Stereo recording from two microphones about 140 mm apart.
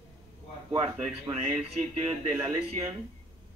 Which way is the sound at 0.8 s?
Centre (ahead or behind).